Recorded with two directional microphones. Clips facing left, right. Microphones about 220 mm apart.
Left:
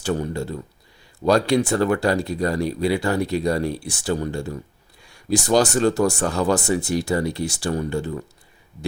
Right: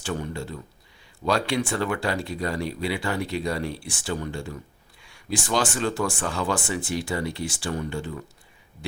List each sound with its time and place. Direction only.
0.0 s speech: 40° left (ahead or behind)